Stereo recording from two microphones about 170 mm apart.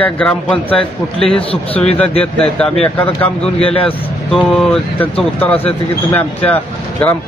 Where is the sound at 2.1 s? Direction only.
35° left (ahead or behind).